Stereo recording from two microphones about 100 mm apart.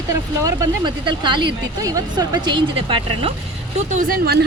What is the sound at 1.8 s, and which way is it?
Speech, 35° right (ahead or behind).